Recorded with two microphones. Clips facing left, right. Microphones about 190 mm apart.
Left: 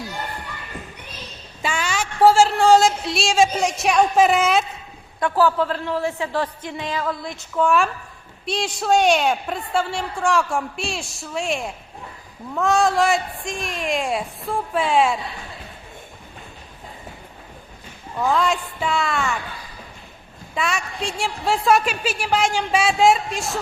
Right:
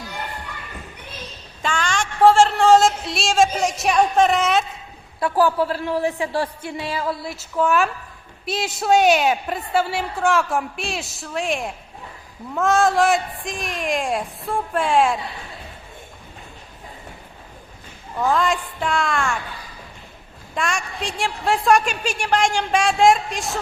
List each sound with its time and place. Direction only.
1.6 s a woman's voice: 5° left (ahead or behind)
5.2 s a woman's voice: 15° right (ahead or behind)
18.2 s a woman's voice: centre (ahead or behind)
20.6 s a woman's voice: centre (ahead or behind)